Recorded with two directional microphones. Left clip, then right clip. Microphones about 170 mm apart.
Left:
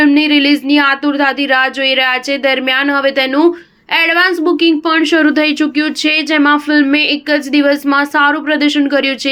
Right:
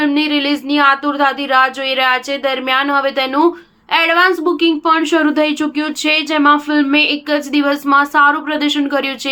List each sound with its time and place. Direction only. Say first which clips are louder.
0.0 s a woman's voice: left 5 dB; 25° left (ahead or behind)